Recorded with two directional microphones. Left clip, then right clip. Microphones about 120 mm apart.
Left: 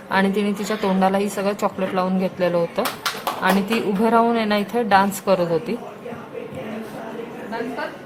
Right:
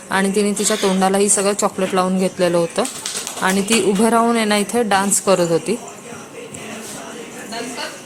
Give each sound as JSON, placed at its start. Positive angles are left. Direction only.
{"t": 0.1, "sound": "a woman's voice", "side_deg": -30}